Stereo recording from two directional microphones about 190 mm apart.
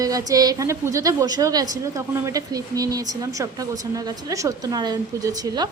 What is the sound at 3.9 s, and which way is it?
Speech, 15° right (ahead or behind).